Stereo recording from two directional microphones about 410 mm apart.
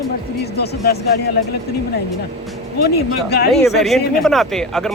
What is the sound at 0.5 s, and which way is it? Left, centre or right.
Speech, left.